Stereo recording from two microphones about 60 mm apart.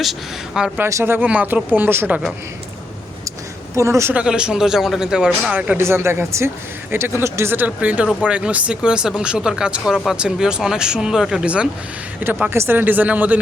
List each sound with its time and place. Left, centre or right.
0.0 s speech: centre
1.2 s speech: right
1.7 s a woman's voice: right
3.8 s a woman's voice: right
4.1 s speech: centre
5.5 s speech: right
5.8 s speech: right
7.5 s speech: right
12.2 s speech: right